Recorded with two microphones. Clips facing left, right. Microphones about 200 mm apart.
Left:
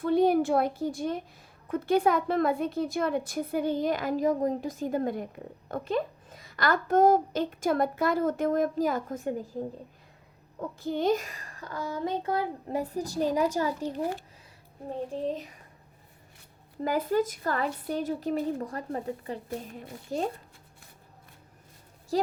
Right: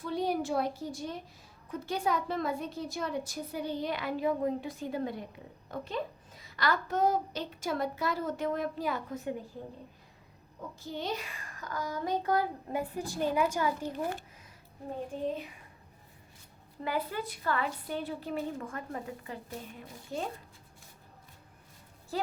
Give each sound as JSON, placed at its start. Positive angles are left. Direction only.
{"t": 0.0, "sound": "a woman's voice", "side_deg": 55}
{"t": 10.8, "sound": "a child's voice", "side_deg": 55}
{"t": 16.8, "sound": "a child's voice", "side_deg": 40}
{"t": 22.1, "sound": "speech", "side_deg": 40}